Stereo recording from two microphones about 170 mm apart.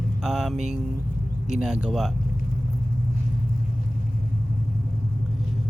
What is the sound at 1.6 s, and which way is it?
Speech, 5° right (ahead or behind).